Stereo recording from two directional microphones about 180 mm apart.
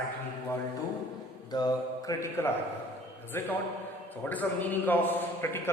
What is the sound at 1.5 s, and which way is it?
Mantra, 20° left (ahead or behind).